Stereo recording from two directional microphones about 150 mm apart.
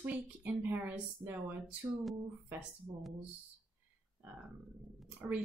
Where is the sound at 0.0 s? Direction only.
10° right (ahead or behind).